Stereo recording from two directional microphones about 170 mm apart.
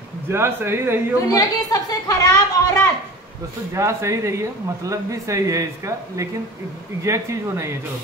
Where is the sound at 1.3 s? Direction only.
20° left (ahead or behind).